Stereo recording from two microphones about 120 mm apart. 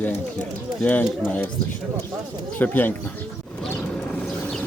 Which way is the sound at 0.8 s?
10° left (ahead or behind).